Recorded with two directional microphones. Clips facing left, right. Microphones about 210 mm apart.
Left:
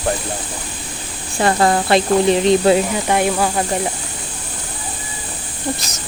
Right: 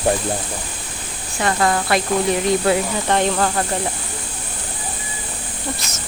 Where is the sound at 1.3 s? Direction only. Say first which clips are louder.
Left 4 dB; 30° left (ahead or behind).